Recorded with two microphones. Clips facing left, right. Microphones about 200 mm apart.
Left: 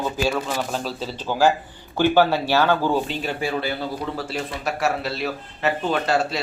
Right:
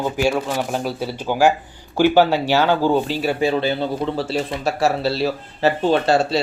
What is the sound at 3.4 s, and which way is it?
Speech, 25° right (ahead or behind).